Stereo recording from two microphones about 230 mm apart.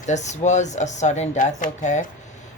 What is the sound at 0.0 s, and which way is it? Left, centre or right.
Speech, left.